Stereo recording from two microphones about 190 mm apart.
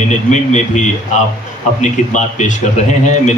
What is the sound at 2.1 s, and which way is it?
Speech, 40° left (ahead or behind).